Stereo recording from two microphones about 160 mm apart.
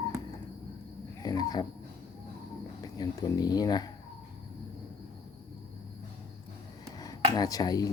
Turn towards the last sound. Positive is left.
turn(degrees=25)  # may be behind; listen again after turning